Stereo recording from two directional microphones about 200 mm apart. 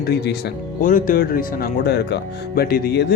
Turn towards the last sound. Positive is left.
turn(degrees=55)  # may be behind; listen again after turning